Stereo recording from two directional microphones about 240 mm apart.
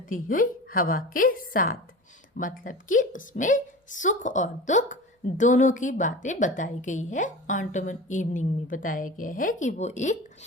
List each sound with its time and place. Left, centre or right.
0.1 s a woman's voice: left